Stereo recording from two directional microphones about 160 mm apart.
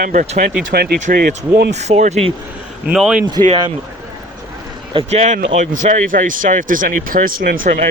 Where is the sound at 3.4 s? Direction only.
30° right (ahead or behind).